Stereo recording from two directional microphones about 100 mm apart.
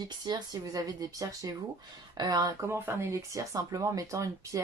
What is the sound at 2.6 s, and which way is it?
A woman's voice, 25° right (ahead or behind).